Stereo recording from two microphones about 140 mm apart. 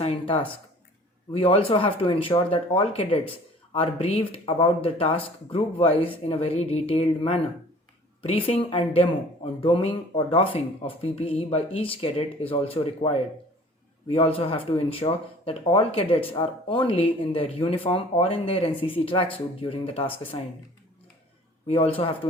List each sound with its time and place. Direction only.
0.0 s speech: 40° left (ahead or behind)
21.7 s speech: 40° left (ahead or behind)